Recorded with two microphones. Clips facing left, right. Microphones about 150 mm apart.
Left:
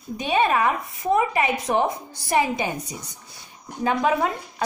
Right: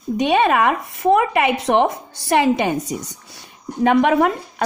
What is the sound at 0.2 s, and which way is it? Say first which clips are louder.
Speech: right 4 dB; 75° right (ahead or behind).